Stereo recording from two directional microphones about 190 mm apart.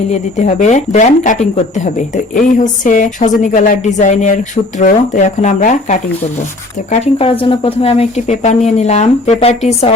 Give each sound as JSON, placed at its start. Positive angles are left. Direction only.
{"t": 0.1, "sound": "speech", "side_deg": 35}